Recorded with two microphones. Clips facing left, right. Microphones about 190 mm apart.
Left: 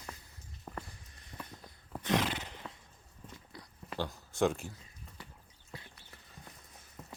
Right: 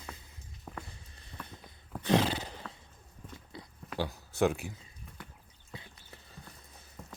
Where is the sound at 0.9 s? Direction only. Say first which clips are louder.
Right 1 dB; 30° right (ahead or behind).